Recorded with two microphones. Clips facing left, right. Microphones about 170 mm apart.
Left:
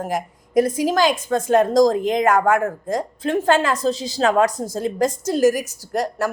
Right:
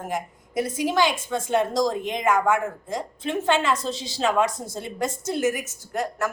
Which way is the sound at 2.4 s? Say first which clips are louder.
Left 4 dB; 45° left (ahead or behind).